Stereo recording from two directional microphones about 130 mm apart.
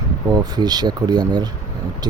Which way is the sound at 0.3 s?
30° right (ahead or behind).